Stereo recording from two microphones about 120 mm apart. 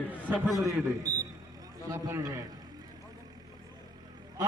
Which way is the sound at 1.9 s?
25° right (ahead or behind).